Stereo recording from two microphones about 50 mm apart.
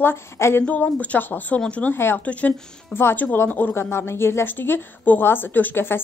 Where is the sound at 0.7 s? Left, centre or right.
Left.